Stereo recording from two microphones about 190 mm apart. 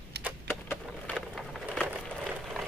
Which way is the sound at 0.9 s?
Centre (ahead or behind).